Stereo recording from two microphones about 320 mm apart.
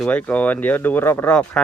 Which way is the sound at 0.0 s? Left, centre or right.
Centre.